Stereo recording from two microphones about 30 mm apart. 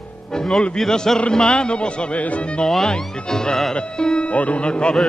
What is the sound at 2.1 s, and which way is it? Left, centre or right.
Speech, left.